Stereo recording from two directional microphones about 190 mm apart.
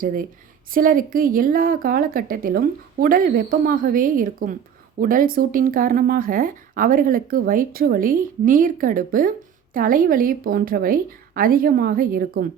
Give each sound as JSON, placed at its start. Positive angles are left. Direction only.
{"t": 0.7, "sound": "speech", "side_deg": -45}